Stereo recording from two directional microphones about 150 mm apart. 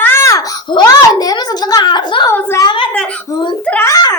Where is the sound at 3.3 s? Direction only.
30° left (ahead or behind).